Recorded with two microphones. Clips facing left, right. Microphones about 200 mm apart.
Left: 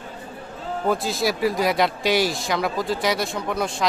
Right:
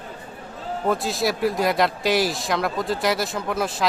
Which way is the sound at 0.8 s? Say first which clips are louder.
Even; centre (ahead or behind).